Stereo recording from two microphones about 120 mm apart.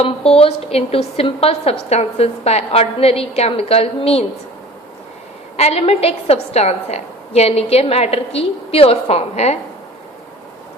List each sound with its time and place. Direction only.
0.0 s a woman's voice: 55° left (ahead or behind)
5.5 s a woman's voice: 60° left (ahead or behind)